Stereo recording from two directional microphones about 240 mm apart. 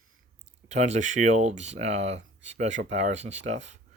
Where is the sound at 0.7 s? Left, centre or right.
Right.